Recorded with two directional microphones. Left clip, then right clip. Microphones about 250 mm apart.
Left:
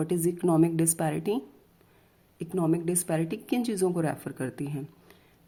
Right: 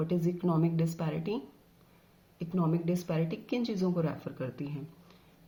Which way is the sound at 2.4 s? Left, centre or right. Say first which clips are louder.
Left 6 dB; left.